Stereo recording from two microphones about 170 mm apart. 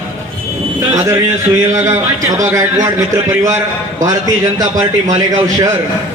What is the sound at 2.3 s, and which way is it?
A man's voice, 20° right (ahead or behind).